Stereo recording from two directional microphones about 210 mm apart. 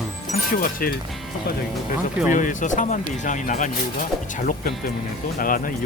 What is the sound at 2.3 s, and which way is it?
Speech, 40° left (ahead or behind).